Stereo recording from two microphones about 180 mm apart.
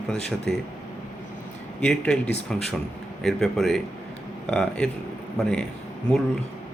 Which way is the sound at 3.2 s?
Centre (ahead or behind).